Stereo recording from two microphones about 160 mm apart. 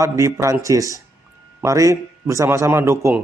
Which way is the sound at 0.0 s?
20° right (ahead or behind).